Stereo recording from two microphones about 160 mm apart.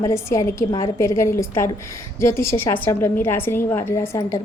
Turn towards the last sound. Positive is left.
turn(degrees=15)  # may be behind; listen again after turning